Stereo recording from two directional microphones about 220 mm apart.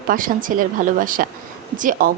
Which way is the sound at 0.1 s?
40° right (ahead or behind).